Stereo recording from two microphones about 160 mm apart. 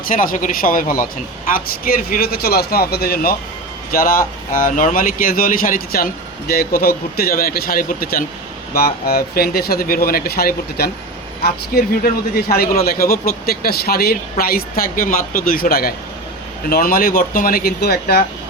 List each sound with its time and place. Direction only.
0.1 s speech: 60° left (ahead or behind)
6.5 s speech: 75° left (ahead or behind)